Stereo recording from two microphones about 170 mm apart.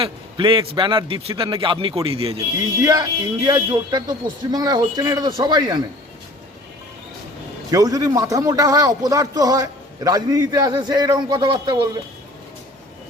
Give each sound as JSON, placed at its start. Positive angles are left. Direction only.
{"t": 0.0, "sound": "a man's voice", "side_deg": -30}
{"t": 2.8, "sound": "a man's voice", "side_deg": -20}
{"t": 7.7, "sound": "a man's voice", "side_deg": -20}